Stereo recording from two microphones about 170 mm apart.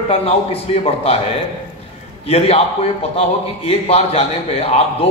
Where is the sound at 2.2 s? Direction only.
35° left (ahead or behind).